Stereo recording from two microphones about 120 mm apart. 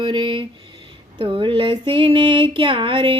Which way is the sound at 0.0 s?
45° right (ahead or behind).